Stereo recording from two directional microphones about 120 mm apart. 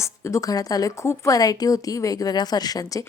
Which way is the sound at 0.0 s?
25° left (ahead or behind).